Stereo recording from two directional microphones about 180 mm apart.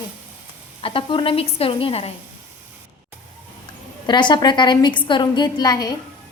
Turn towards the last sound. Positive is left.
turn(degrees=20)  # may be behind; listen again after turning